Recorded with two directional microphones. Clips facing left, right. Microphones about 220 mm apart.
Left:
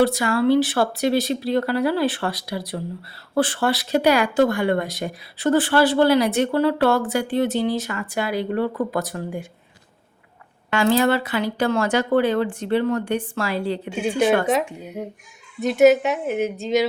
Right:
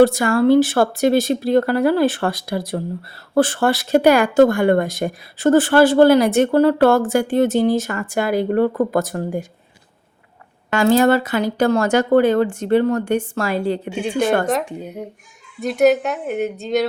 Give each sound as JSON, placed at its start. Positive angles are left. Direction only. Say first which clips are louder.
{"t": 0.0, "sound": "speech", "louder": "right 5 dB", "side_deg": -50}
{"t": 10.7, "sound": "speech", "louder": "right 4 dB", "side_deg": -45}
{"t": 14.4, "sound": "a woman's voice", "louder": "right 1 dB", "side_deg": 0}